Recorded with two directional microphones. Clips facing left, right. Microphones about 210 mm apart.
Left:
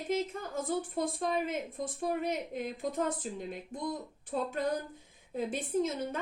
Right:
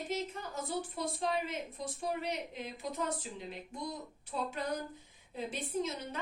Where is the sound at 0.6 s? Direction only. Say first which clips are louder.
Left 5 dB; 50° left (ahead or behind).